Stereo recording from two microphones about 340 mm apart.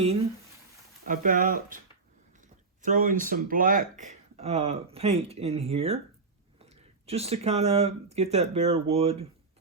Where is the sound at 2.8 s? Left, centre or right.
Right.